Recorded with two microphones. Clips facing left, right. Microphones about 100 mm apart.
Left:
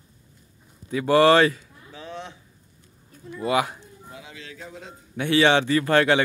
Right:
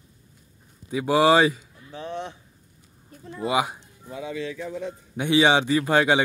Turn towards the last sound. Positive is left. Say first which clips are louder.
# left 1 dB
turn(degrees=-15)  # may be behind; listen again after turning